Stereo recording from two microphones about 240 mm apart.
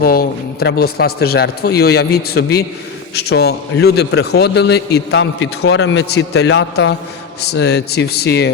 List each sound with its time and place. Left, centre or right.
0.0 s a man's voice: left